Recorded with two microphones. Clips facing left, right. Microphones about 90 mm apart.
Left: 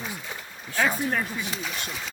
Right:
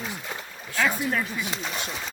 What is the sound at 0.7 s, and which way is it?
Speech, 30° left (ahead or behind).